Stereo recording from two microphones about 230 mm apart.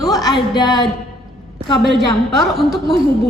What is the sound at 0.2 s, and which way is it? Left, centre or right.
Speech, centre.